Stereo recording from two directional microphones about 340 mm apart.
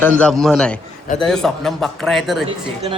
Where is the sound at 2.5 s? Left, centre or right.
Centre.